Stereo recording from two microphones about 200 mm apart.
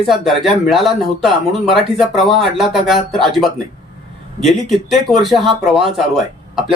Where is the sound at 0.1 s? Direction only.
Centre (ahead or behind).